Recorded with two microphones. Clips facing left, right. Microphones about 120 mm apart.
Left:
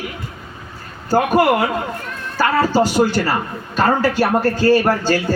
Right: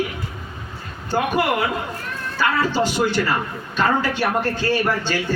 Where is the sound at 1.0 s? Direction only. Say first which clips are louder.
Left 6 dB; 40° left (ahead or behind).